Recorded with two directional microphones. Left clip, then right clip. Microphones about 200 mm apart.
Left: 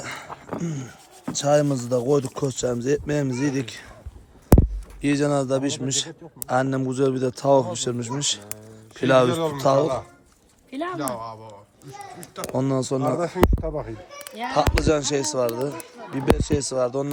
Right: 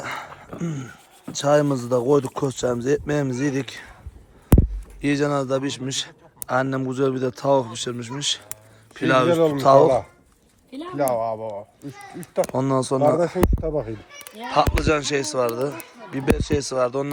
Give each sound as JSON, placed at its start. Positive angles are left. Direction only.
{"t": 0.0, "sound": "dog", "side_deg": 0}
{"t": 0.6, "sound": "speech", "side_deg": 0}
{"t": 10.9, "sound": "speech", "side_deg": -35}
{"t": 12.4, "sound": "speech", "side_deg": 5}
{"t": 13.1, "sound": "speech", "side_deg": -40}
{"t": 14.2, "sound": "speech", "side_deg": 5}